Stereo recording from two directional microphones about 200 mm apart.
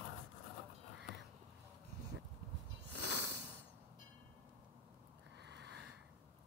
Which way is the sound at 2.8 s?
60° right (ahead or behind).